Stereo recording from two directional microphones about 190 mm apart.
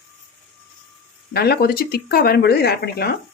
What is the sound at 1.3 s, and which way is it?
Speech, 55° left (ahead or behind).